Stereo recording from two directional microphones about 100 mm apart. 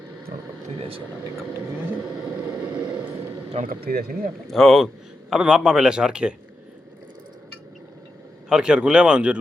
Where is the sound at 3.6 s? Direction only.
90° right.